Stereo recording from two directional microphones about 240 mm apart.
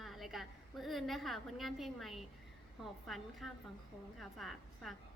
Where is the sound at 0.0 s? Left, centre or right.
Centre.